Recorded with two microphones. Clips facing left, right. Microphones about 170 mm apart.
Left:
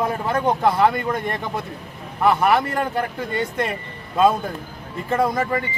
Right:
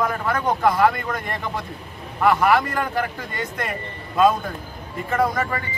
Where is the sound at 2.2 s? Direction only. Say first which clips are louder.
Even; 25° left (ahead or behind).